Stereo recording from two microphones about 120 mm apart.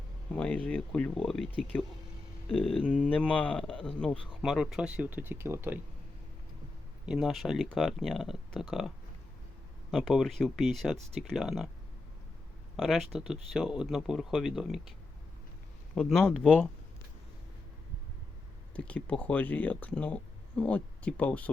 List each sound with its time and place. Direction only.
0.3 s speech: 10° left (ahead or behind)
2.6 s speech: 50° left (ahead or behind)
2.8 s speech: 10° left (ahead or behind); by 5.8 s 20° right (ahead or behind)
7.0 s speech: 5° right (ahead or behind)
9.9 s speech: centre (ahead or behind)
12.7 s speech: centre (ahead or behind)
16.0 s speech: 5° left (ahead or behind)
18.8 s speech: 10° left (ahead or behind)